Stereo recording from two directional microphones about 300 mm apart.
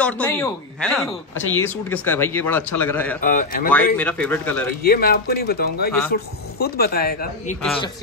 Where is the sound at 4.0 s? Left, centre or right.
Centre.